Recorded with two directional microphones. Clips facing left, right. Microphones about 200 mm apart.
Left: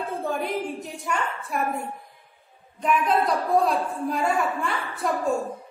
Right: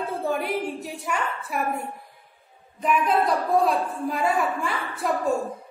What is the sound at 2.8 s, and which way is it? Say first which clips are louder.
A woman's voice: even; centre (ahead or behind).